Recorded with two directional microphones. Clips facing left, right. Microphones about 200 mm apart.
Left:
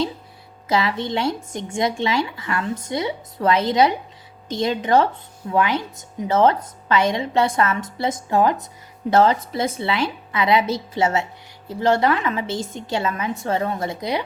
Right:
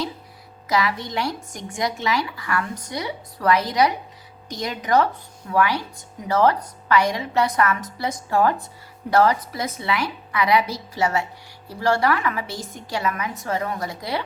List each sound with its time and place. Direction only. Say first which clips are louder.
0.7 s a woman's voice: left 2 dB; 25° left (ahead or behind)